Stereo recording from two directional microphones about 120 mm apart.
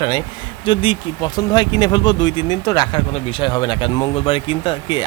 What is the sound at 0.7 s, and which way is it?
Speech, 50° left (ahead or behind).